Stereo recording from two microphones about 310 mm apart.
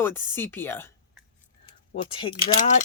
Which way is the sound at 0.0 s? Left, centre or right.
Centre.